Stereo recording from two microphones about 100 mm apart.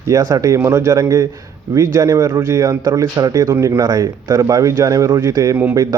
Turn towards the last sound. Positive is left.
turn(degrees=-35)  # may be behind; listen again after turning